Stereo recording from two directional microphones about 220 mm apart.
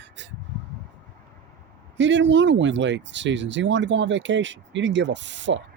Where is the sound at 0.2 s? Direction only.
55° right (ahead or behind).